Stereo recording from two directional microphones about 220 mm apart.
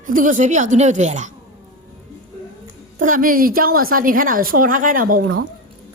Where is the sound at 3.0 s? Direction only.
40° right (ahead or behind).